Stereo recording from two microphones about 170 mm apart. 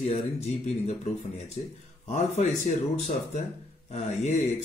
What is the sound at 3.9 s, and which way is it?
Speech, 40° left (ahead or behind).